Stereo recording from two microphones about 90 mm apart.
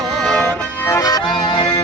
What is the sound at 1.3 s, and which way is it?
Music, 65° left (ahead or behind).